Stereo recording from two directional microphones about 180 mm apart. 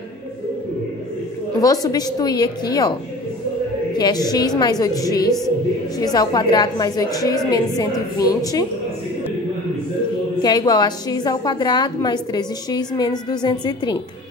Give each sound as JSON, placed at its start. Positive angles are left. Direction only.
{"t": 1.6, "sound": "a woman's voice", "side_deg": 20}
{"t": 4.0, "sound": "a woman's voice", "side_deg": 20}
{"t": 10.4, "sound": "a woman's voice", "side_deg": 20}